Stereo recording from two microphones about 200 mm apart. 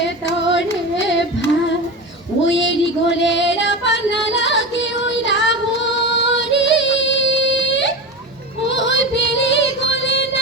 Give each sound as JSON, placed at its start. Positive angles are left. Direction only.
{"t": 0.0, "sound": "carnatic music", "side_deg": 65}
{"t": 1.1, "sound": "female singing", "side_deg": 65}
{"t": 2.5, "sound": "female singing", "side_deg": 65}
{"t": 6.1, "sound": "music", "side_deg": 65}
{"t": 8.6, "sound": "yodeling", "side_deg": 65}